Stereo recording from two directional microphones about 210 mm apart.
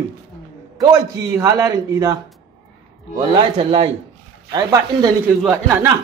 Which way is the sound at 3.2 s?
25° right (ahead or behind).